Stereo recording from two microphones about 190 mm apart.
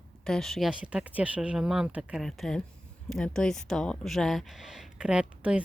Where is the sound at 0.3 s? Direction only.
Centre (ahead or behind).